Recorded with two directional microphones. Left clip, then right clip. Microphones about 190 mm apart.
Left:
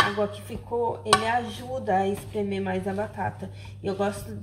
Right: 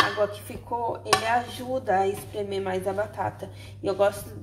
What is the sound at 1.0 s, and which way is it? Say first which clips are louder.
Speech: even; 15° right (ahead or behind).